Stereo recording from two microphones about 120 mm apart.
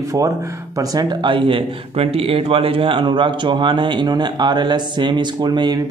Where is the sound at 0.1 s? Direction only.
25° right (ahead or behind).